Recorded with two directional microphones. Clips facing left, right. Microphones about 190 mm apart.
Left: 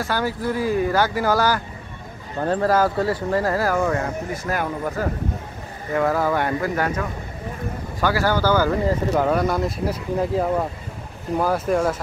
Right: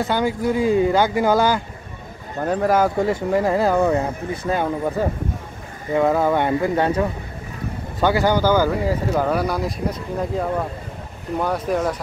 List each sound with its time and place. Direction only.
0.0 s speech: 20° right (ahead or behind)
9.1 s speech: centre (ahead or behind)